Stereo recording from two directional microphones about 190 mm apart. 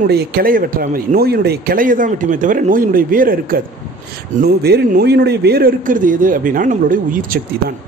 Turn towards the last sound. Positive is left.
turn(degrees=-45)  # may be behind; listen again after turning